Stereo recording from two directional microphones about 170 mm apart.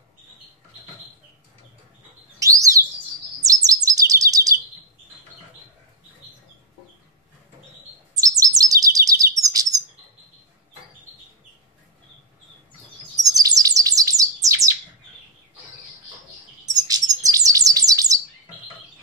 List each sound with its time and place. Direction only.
2.3 s bird: 20° right (ahead or behind)
3.4 s chirp: 20° right (ahead or behind)
8.1 s chirp: 20° right (ahead or behind)
13.1 s bird: 20° right (ahead or behind)
16.7 s bird: 20° right (ahead or behind)